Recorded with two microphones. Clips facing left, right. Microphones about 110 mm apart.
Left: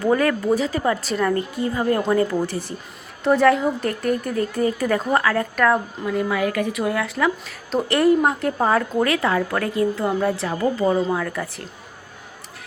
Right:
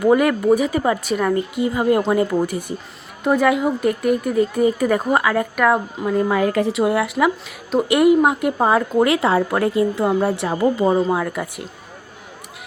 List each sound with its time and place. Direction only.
0.0 s a woman's voice: 15° right (ahead or behind)
6.1 s a woman's voice: 35° right (ahead or behind); by 11.6 s 15° right (ahead or behind)